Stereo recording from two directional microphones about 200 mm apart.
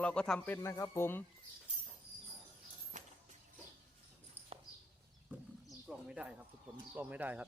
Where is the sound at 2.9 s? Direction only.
40° right (ahead or behind).